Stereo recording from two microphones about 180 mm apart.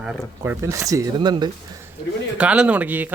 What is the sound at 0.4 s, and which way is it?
Speech, 15° right (ahead or behind).